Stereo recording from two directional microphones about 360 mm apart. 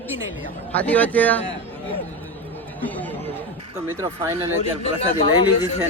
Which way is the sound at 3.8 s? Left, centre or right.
Centre.